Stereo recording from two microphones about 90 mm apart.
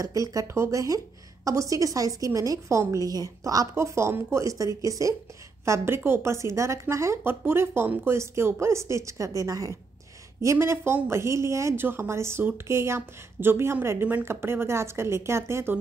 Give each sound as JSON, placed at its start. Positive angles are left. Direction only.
{"t": 0.0, "sound": "a woman's voice", "side_deg": -40}
{"t": 5.7, "sound": "a woman's voice", "side_deg": -30}